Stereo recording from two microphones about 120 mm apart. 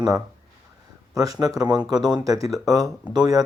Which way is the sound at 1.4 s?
30° right (ahead or behind).